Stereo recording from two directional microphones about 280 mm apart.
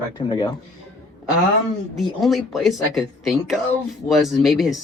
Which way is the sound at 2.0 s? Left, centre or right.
Centre.